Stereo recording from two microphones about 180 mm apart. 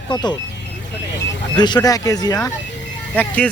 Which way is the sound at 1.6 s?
25° left (ahead or behind).